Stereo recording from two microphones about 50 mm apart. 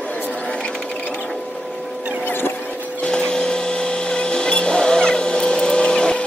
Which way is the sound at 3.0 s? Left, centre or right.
Centre.